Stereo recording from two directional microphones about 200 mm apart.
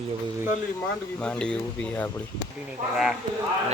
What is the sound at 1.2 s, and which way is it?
Speech, 5° left (ahead or behind).